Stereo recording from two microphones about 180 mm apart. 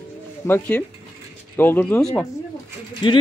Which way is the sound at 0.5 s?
10° left (ahead or behind).